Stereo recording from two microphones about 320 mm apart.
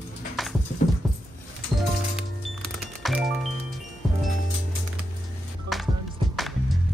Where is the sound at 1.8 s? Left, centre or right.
Centre.